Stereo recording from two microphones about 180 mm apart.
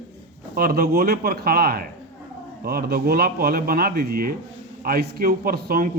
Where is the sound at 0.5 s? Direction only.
55° right (ahead or behind).